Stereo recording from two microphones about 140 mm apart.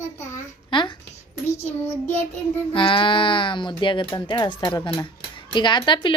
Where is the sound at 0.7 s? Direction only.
35° left (ahead or behind).